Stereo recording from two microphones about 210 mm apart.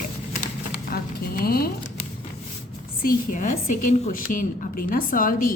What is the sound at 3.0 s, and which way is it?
A woman's voice, 40° left (ahead or behind).